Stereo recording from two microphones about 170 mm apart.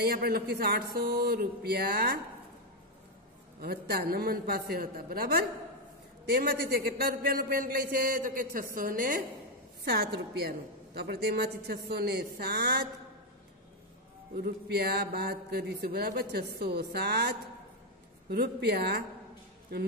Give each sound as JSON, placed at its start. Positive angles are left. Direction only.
{"t": 0.0, "sound": "a man's voice", "side_deg": -65}
{"t": 3.6, "sound": "a man's voice", "side_deg": -65}
{"t": 9.8, "sound": "speech", "side_deg": -70}
{"t": 14.3, "sound": "a man's voice", "side_deg": -65}